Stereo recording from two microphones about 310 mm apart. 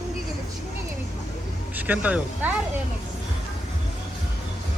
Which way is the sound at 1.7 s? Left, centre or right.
Centre.